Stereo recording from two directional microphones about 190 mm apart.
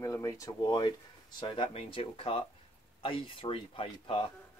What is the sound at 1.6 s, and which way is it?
Speech, 35° left (ahead or behind).